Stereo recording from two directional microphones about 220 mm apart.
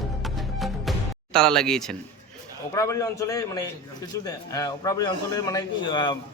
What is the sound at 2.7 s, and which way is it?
A man's voice, 15° left (ahead or behind).